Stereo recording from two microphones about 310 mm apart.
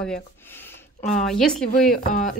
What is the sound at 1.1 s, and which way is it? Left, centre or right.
Speech, centre.